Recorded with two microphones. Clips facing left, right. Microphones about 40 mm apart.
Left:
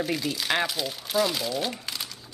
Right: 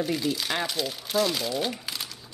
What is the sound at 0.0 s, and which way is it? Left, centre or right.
Speech, centre.